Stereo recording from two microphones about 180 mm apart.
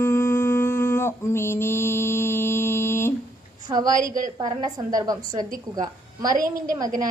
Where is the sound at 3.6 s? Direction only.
20° right (ahead or behind).